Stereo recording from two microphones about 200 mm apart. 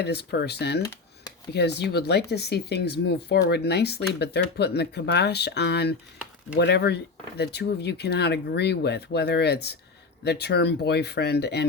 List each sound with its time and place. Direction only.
0.0 s speech: 55° left (ahead or behind)